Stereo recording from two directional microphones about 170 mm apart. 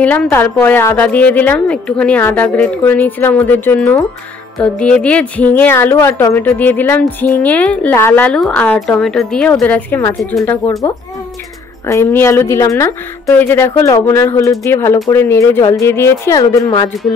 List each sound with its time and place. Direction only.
0.0 s a woman's voice: 10° left (ahead or behind)
11.9 s a woman's voice: 15° left (ahead or behind)